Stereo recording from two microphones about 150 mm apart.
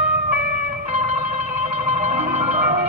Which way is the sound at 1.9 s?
50° right (ahead or behind).